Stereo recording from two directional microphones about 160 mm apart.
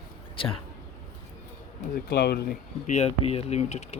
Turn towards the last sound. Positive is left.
turn(degrees=45)  # may be behind; listen again after turning